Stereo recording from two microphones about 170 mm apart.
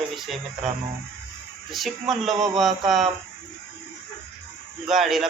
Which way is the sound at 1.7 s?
Centre (ahead or behind).